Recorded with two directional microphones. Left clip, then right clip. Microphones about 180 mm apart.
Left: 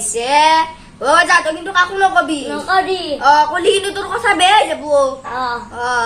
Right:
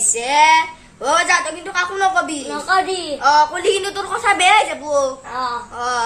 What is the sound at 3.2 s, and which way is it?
A woman's voice, 20° right (ahead or behind).